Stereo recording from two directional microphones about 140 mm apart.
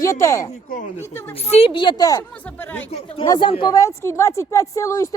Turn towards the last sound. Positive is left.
turn(degrees=20)  # may be behind; listen again after turning